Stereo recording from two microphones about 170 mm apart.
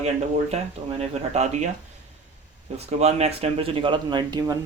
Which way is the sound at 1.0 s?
40° right (ahead or behind).